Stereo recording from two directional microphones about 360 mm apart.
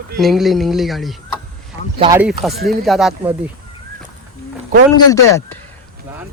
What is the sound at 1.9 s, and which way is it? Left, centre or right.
Speech, centre.